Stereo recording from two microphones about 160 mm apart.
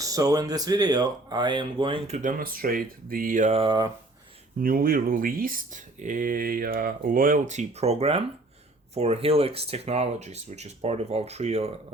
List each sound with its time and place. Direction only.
0.0 s speech: 20° right (ahead or behind); by 2.3 s 45° right (ahead or behind)
2.4 s speech: 65° right (ahead or behind)
3.6 s speech: 25° right (ahead or behind)
4.6 s speech: 65° right (ahead or behind); by 11.7 s 40° right (ahead or behind)